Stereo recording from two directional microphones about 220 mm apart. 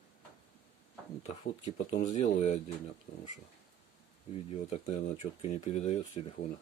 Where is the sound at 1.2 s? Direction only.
30° left (ahead or behind).